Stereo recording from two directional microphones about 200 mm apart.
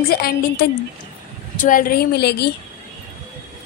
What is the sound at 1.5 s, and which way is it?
Speech, 40° left (ahead or behind).